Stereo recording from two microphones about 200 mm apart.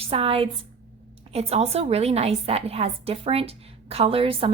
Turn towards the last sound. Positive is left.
turn(degrees=-30)  # may be behind; listen again after turning